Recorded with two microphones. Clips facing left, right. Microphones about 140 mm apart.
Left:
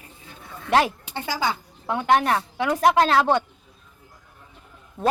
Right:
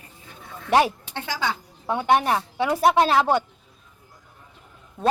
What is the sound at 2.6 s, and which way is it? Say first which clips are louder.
Speech: even; 5° right (ahead or behind).